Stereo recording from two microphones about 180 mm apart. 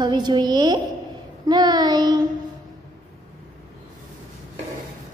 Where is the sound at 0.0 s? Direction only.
25° right (ahead or behind).